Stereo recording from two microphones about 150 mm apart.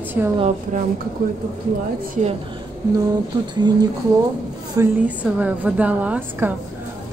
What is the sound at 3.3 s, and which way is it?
Speech, 30° right (ahead or behind).